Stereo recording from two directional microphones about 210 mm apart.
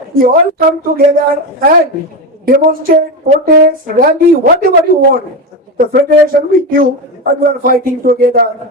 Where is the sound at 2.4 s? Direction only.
45° right (ahead or behind).